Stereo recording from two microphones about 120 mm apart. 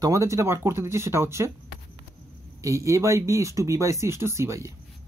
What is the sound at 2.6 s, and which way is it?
Speech, 25° right (ahead or behind).